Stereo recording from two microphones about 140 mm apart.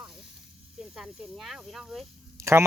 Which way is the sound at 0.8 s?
5° right (ahead or behind).